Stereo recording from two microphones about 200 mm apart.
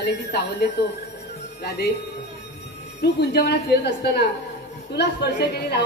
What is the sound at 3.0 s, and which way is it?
Speech, 55° left (ahead or behind).